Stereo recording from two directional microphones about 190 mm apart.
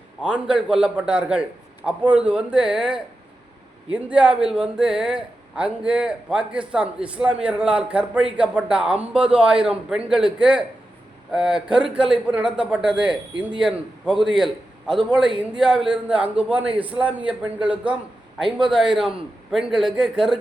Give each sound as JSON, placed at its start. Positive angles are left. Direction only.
{"t": 0.2, "sound": "a man's voice", "side_deg": -5}